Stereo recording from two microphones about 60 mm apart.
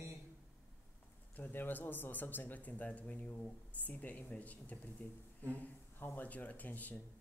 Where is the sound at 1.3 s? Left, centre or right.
Left.